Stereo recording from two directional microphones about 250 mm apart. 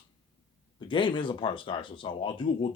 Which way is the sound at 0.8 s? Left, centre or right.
Centre.